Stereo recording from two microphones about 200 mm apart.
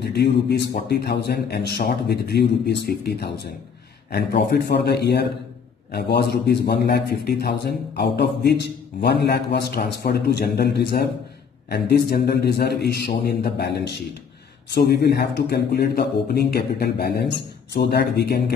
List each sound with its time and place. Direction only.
0.0 s a man's voice: 55° left (ahead or behind)